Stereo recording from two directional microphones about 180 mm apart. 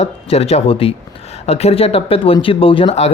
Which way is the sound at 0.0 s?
35° left (ahead or behind).